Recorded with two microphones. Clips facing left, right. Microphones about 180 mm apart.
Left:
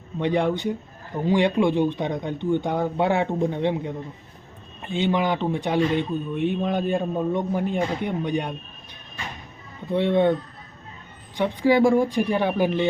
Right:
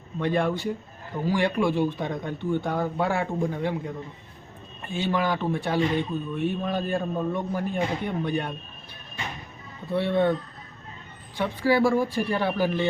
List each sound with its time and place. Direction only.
0.2 s speech: 20° left (ahead or behind)
9.9 s speech: 15° left (ahead or behind)
11.3 s speech: 15° left (ahead or behind)